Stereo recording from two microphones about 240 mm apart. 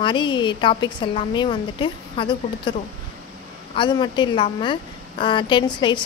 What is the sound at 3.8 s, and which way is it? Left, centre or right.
Speech, centre.